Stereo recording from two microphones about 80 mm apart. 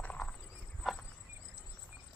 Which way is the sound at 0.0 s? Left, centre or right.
Centre.